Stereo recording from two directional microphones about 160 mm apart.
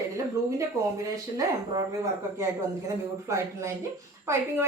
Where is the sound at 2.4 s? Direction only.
20° right (ahead or behind).